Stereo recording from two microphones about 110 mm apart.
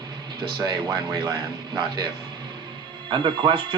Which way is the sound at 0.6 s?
40° right (ahead or behind).